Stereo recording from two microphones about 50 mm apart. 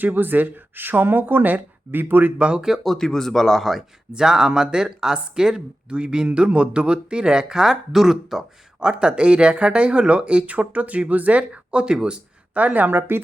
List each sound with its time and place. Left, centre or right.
0.0 s speech: right
2.4 s speech: centre
2.8 s speech: centre
4.1 s speech: centre
8.9 s speech: centre
12.5 s speech: right